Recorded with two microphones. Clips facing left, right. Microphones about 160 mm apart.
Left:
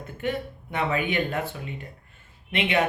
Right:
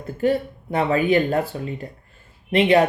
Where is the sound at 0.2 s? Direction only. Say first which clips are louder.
Right 9 dB; 35° right (ahead or behind).